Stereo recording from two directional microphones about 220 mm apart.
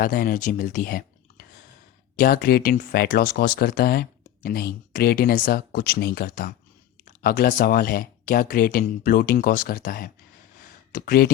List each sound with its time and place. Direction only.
0.0 s speech: 40° left (ahead or behind)